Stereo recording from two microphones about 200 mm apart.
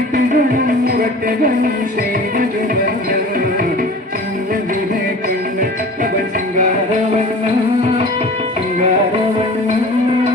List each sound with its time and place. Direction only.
0.3 s music: 45° right (ahead or behind)